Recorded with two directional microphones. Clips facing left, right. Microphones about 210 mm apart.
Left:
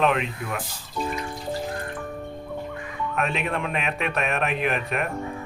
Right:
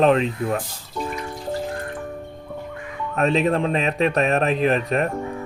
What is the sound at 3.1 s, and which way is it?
Speech, 35° right (ahead or behind).